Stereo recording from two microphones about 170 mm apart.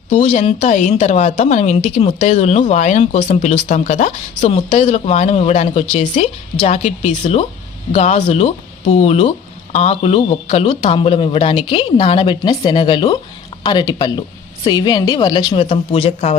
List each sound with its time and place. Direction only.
0.1 s a woman's voice: 45° left (ahead or behind); by 15.6 s 25° left (ahead or behind)
15.7 s a woman's voice: 40° left (ahead or behind)